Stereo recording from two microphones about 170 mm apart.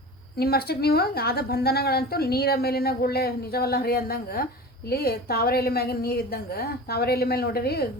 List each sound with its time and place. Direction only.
0.3 s a woman's voice: 65° left (ahead or behind)